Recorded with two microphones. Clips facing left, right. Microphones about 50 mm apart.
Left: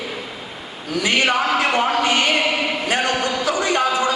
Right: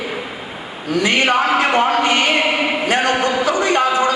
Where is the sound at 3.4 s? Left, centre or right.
Right.